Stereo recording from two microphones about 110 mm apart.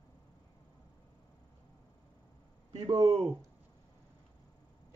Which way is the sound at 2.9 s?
35° right (ahead or behind).